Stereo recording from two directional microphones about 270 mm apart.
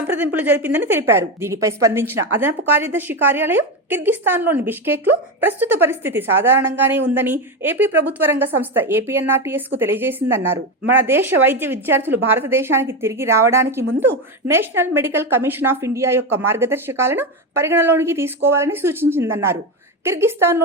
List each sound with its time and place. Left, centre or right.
0.1 s a woman's voice: centre